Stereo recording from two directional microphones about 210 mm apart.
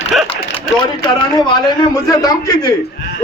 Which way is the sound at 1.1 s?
20° left (ahead or behind).